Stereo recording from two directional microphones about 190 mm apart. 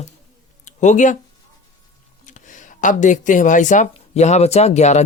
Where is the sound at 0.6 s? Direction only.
40° left (ahead or behind).